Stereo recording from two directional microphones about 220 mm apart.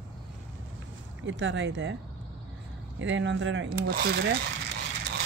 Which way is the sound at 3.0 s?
55° right (ahead or behind).